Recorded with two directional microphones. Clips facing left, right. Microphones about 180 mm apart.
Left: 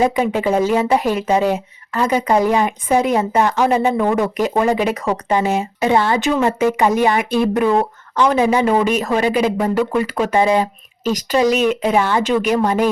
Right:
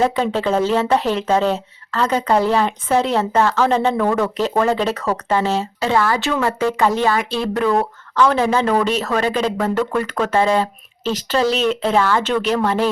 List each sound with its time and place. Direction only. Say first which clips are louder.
0.0 s speech: left 2 dB; 10° left (ahead or behind)